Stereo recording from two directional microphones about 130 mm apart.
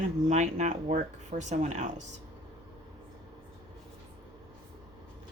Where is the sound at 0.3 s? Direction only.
65° right (ahead or behind).